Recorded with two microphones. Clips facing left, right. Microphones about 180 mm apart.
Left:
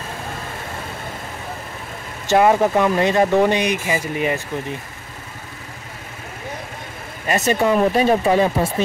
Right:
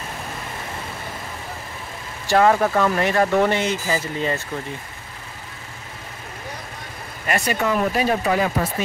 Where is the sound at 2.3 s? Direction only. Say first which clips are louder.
Left 2 dB; 20° left (ahead or behind).